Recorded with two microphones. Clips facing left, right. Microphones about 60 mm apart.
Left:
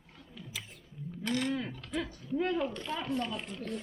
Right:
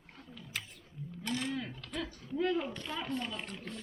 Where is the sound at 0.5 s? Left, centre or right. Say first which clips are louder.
Right 2 dB; right.